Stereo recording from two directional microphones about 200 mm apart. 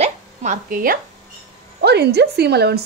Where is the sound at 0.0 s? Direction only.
35° right (ahead or behind).